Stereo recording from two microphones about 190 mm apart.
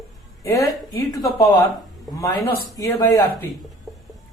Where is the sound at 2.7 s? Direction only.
15° left (ahead or behind).